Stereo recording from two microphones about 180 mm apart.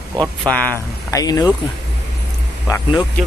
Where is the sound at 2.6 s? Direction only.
20° left (ahead or behind).